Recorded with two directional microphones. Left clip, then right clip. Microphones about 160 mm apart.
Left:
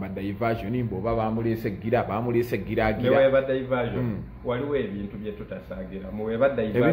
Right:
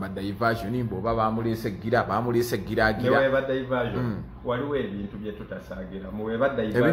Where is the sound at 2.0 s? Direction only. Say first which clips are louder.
Right 3 dB; centre (ahead or behind).